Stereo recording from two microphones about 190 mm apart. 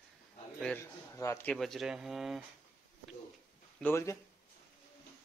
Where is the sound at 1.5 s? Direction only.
Centre (ahead or behind).